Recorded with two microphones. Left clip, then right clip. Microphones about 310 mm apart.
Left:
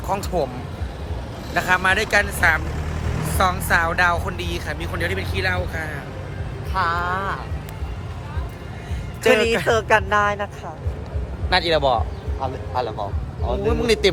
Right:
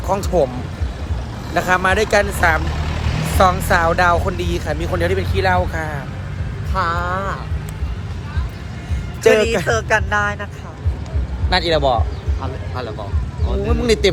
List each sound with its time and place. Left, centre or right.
0.1 s speech: centre
1.5 s speech: centre
6.7 s speech: centre
9.4 s speech: centre
9.6 s speech: left
11.4 s speech: centre
12.4 s speech: left
13.7 s speech: centre